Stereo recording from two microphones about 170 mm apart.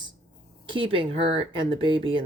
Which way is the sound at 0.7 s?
30° right (ahead or behind).